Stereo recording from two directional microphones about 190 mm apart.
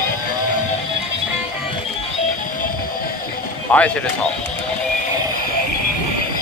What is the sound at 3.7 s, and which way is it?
Speech, 10° left (ahead or behind).